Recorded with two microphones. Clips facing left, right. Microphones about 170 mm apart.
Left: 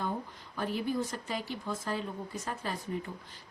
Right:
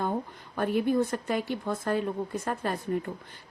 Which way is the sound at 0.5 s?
55° right (ahead or behind).